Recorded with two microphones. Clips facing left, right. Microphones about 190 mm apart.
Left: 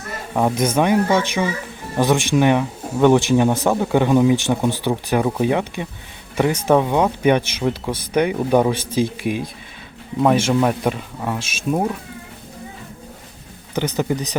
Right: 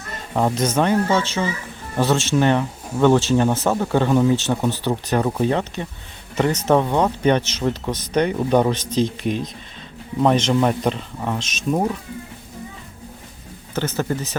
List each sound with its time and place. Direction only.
0.3 s speech: 10° left (ahead or behind)
13.7 s speech: 15° left (ahead or behind)